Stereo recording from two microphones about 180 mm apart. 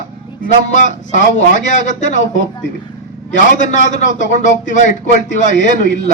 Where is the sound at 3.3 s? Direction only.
45° left (ahead or behind).